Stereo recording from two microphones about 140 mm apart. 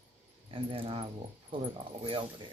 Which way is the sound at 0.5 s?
40° right (ahead or behind).